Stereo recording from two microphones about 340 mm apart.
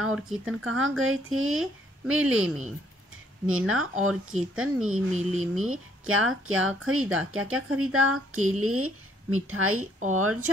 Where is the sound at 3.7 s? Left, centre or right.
Right.